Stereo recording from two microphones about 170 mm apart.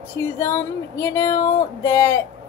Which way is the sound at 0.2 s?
15° left (ahead or behind).